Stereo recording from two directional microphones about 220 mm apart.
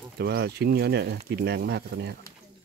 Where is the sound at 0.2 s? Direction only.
45° right (ahead or behind).